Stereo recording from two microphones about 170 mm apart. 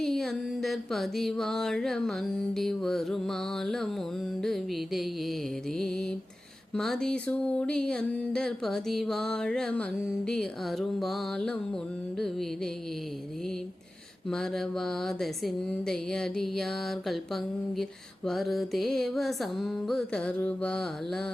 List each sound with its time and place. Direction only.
0.0 s music: centre (ahead or behind)
14.3 s music: 5° left (ahead or behind)